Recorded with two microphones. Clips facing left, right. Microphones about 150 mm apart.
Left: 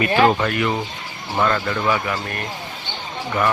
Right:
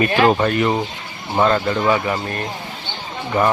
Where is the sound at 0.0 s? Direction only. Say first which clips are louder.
Right 1 dB; 35° right (ahead or behind).